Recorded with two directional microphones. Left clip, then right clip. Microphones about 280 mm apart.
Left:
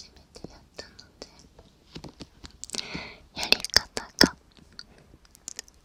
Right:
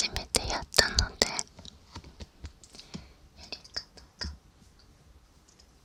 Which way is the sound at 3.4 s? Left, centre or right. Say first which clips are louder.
Left 18 dB; left.